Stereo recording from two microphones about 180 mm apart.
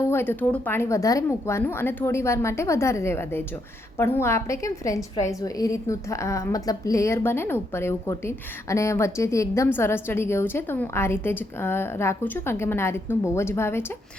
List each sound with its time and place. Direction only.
0.1 s a woman's voice: 10° left (ahead or behind)